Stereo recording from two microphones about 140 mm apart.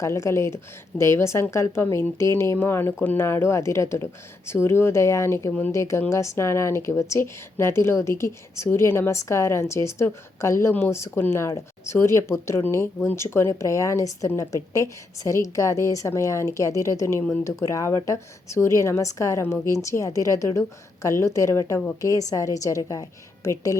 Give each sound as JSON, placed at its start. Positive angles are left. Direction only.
{"t": 0.0, "sound": "a woman's voice", "side_deg": 20}